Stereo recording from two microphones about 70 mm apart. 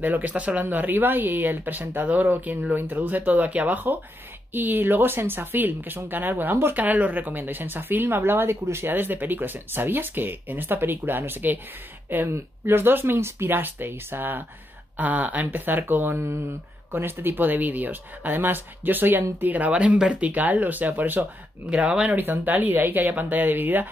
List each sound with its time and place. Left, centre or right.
0.0 s speech: right
22.1 s speech: right